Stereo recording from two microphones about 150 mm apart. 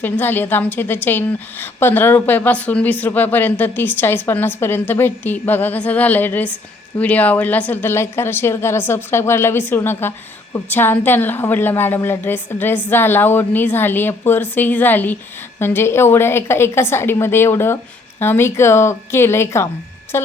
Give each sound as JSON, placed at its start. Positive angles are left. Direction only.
{"t": 0.0, "sound": "a woman's voice", "side_deg": 15}